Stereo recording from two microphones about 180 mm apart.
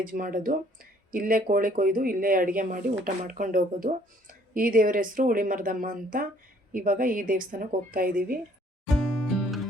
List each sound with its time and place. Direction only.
0.1 s speech: 50° right (ahead or behind)
8.9 s music: centre (ahead or behind)